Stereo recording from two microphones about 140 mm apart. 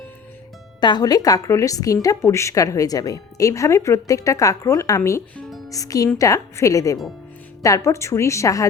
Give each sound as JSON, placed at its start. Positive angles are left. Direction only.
{"t": 0.8, "sound": "a woman's voice", "side_deg": 30}